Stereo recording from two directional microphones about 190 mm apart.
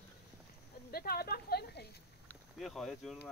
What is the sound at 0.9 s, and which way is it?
Speech, 55° left (ahead or behind).